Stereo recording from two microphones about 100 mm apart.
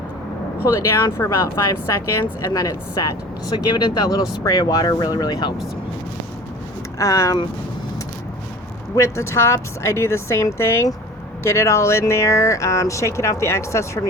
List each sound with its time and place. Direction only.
0.7 s speech: 30° left (ahead or behind); by 5.5 s 45° left (ahead or behind)
7.0 s speech: 35° left (ahead or behind)
9.0 s speech: 30° left (ahead or behind)